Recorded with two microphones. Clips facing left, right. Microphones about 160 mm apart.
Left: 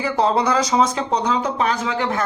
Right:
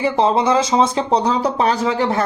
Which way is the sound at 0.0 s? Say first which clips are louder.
Right 3 dB; 20° right (ahead or behind).